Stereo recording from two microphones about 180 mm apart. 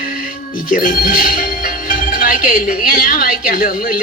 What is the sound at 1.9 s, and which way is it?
A woman's voice, 50° left (ahead or behind).